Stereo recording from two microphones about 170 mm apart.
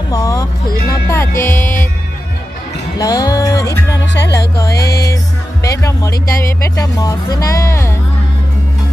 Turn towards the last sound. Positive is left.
turn(degrees=15)  # may be behind; listen again after turning